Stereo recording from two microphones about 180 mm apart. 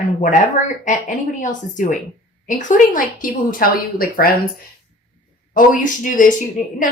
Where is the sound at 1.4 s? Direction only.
45° left (ahead or behind).